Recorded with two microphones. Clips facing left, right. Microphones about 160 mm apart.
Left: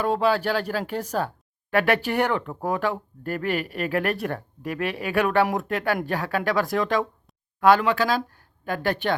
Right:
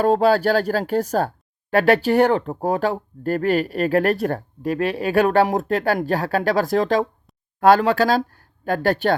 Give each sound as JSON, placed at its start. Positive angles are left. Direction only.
{"t": 0.0, "sound": "speech", "side_deg": -40}